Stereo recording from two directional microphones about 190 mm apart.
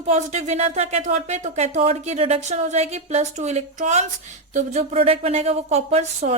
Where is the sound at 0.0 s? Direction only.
35° right (ahead or behind).